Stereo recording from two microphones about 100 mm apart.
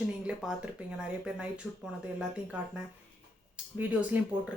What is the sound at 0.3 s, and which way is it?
A woman's voice, 10° right (ahead or behind).